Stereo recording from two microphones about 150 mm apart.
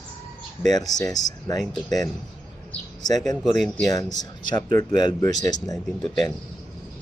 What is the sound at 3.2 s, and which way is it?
Speech, centre (ahead or behind).